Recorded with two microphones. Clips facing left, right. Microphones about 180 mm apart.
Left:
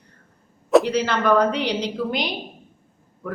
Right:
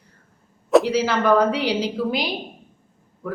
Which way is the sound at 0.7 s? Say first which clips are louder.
Even; centre (ahead or behind).